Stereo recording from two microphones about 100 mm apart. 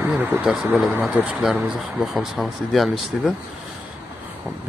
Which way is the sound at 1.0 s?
Centre (ahead or behind).